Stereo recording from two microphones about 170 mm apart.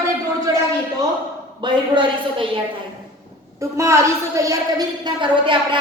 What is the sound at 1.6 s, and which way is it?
Speech, 30° right (ahead or behind).